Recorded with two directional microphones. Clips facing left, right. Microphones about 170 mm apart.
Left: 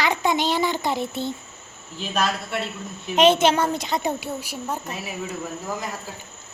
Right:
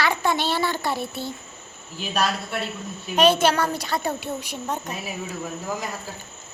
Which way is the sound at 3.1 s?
20° left (ahead or behind).